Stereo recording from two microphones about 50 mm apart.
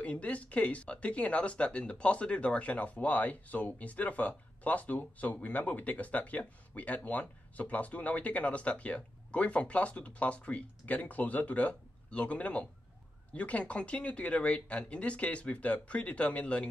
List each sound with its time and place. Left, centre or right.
0.0 s speech: left